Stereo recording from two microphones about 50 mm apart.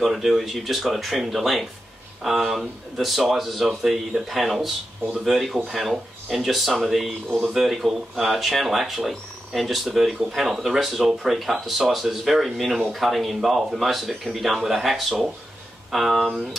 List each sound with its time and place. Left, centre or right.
0.0 s speech: centre